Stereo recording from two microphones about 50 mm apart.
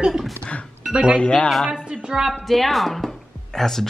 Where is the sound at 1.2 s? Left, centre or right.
Left.